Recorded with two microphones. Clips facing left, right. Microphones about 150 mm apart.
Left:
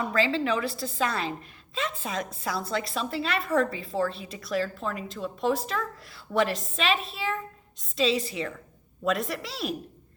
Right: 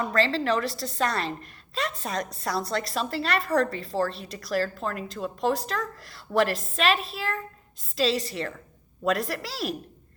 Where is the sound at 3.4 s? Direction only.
35° right (ahead or behind).